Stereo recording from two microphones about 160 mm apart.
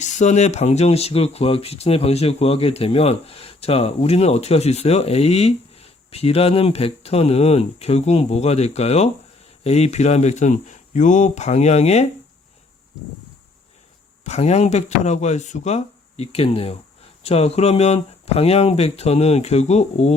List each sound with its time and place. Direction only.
0.0 s speech: 45° left (ahead or behind)
14.3 s speech: 45° left (ahead or behind)